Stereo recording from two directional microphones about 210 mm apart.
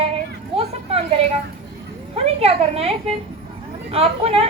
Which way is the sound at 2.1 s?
30° right (ahead or behind).